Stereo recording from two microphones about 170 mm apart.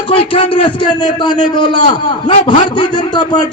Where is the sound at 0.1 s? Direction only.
35° left (ahead or behind).